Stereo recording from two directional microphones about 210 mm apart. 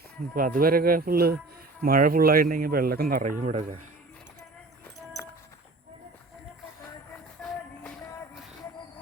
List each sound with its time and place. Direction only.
0.3 s speech: 40° right (ahead or behind)
7.4 s music: centre (ahead or behind)